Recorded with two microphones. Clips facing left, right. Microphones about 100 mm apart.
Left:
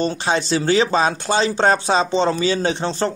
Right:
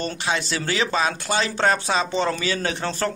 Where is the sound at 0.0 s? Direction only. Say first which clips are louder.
Left 5 dB; 25° left (ahead or behind).